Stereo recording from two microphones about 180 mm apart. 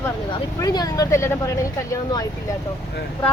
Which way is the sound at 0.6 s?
20° left (ahead or behind).